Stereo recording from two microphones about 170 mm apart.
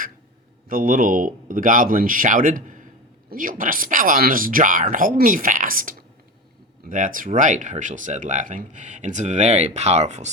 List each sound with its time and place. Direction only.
0.7 s speech: 55° right (ahead or behind)